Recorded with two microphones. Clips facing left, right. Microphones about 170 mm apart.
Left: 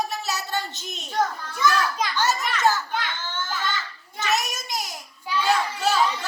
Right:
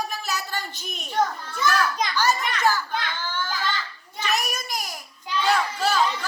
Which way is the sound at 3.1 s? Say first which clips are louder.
Right 2 dB; 20° left (ahead or behind).